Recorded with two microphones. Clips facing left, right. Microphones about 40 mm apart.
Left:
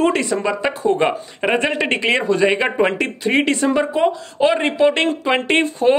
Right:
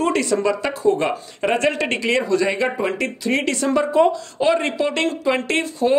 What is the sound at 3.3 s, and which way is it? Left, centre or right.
Speech, centre.